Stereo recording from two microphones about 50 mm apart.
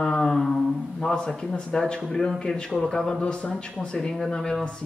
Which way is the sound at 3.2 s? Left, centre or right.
Left.